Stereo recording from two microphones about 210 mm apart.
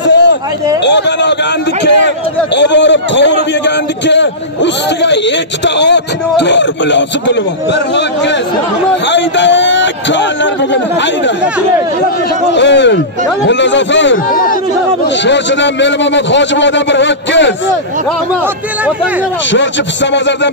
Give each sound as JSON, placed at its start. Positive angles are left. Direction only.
{"t": 0.0, "sound": "a sound", "side_deg": 55}
{"t": 0.8, "sound": "a man's voice", "side_deg": 55}
{"t": 12.5, "sound": "a man's voice", "side_deg": 55}
{"t": 14.1, "sound": "speech", "side_deg": 40}
{"t": 15.2, "sound": "a man's voice", "side_deg": 60}
{"t": 19.5, "sound": "a man's voice", "side_deg": 60}